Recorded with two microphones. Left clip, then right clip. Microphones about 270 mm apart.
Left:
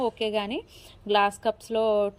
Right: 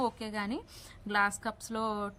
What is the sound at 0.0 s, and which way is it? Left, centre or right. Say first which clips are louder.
A woman's voice: left 7 dB; centre.